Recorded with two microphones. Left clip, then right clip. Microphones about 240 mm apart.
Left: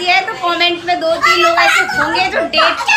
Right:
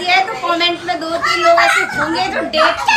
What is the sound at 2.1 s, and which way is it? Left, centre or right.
Speech, centre.